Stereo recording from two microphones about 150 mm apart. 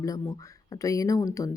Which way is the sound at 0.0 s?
20° left (ahead or behind).